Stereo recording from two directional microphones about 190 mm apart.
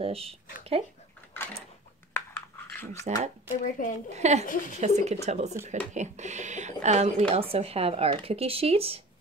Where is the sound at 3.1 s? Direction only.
35° right (ahead or behind).